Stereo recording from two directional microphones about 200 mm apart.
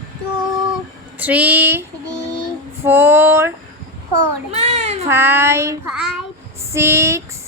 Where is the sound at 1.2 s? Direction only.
10° right (ahead or behind).